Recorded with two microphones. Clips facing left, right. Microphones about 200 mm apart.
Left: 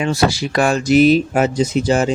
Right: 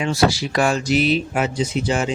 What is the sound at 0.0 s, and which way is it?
Speech, 50° left (ahead or behind).